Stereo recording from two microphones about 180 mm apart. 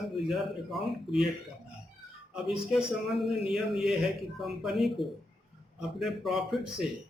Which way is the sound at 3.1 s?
Centre (ahead or behind).